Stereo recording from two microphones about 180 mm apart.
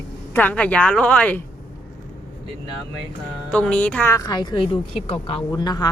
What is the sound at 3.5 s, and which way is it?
A woman's voice, 5° left (ahead or behind).